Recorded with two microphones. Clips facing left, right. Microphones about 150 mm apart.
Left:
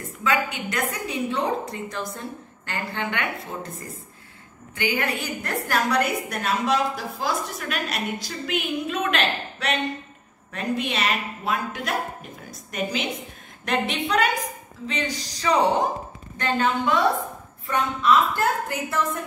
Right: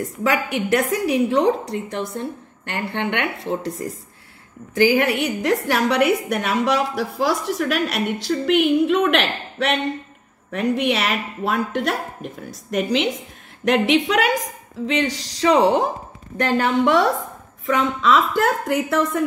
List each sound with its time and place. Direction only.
0.0 s a woman's voice: 85° right; by 9.8 s 65° right (ahead or behind)
10.5 s a woman's voice: 75° right (ahead or behind)
17.6 s a woman's voice: 90° right